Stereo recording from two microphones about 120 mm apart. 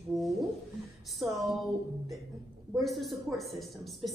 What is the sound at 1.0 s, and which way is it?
Speech, centre (ahead or behind).